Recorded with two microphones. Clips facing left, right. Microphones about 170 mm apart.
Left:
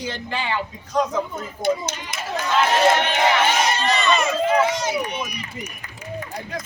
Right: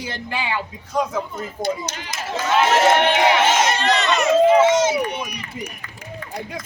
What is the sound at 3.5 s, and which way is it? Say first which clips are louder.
Speech: right 2 dB; 80° right.